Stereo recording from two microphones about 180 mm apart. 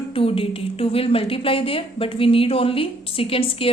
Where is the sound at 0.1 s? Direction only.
30° left (ahead or behind).